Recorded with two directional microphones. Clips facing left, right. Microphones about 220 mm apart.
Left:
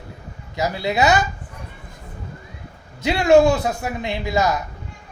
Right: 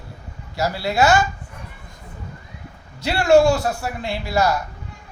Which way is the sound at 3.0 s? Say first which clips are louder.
Left 1 dB; 20° left (ahead or behind).